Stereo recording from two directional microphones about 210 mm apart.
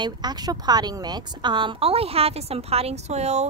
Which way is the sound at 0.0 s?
20° right (ahead or behind).